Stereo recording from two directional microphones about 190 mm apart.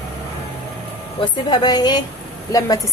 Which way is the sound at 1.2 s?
20° left (ahead or behind).